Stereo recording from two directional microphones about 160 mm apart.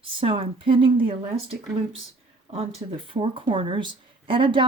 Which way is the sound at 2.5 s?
40° right (ahead or behind).